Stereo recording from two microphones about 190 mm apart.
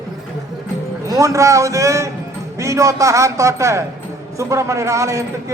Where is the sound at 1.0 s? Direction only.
15° right (ahead or behind).